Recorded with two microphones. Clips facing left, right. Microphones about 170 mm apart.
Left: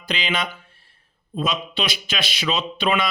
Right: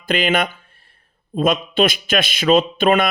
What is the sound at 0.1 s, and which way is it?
Speech, 50° right (ahead or behind).